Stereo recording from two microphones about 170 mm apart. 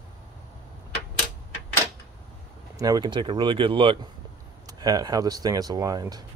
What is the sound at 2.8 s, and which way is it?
Speech, 25° right (ahead or behind).